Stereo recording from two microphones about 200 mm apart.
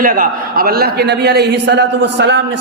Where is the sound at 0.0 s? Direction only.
45° right (ahead or behind).